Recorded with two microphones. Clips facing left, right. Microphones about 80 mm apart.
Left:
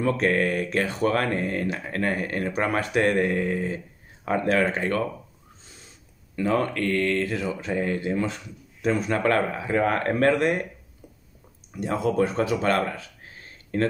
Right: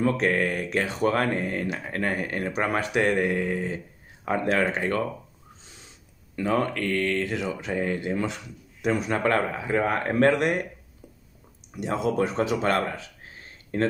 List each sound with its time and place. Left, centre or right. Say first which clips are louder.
0.0 s speech: left 1 dB; right
6.3 s a man's voice: left 1 dB; right
9.2 s speech: left 1 dB; right
10.1 s speech: right 2 dB; right
11.8 s speech: left 2 dB; right